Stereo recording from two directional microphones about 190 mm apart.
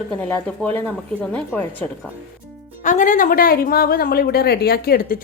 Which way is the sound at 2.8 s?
40° left (ahead or behind).